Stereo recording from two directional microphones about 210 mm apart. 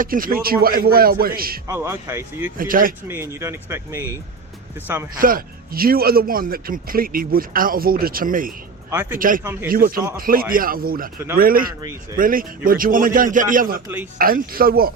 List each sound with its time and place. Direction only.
0.0 s speech: 40° right (ahead or behind)
1.6 s speech: 15° right (ahead or behind)
2.6 s a man's voice: 40° right (ahead or behind)
3.1 s speech: 10° right (ahead or behind)
5.2 s speech: 45° right (ahead or behind)
8.9 s speech: 10° right (ahead or behind)
9.1 s a man's voice: 40° right (ahead or behind)
9.4 s speech: 10° right (ahead or behind)
9.6 s a man's voice: 45° right (ahead or behind)